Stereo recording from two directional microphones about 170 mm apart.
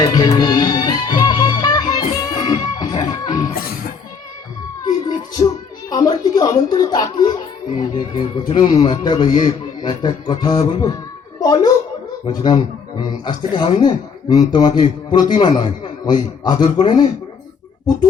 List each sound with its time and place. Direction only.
0.0 s music: 20° left (ahead or behind)
3.5 s music: 60° left (ahead or behind)
4.9 s a sound: 20° left (ahead or behind)
5.9 s music: 20° left (ahead or behind)
7.9 s a man's voice: 30° left (ahead or behind)
8.9 s a man's voice: 25° left (ahead or behind)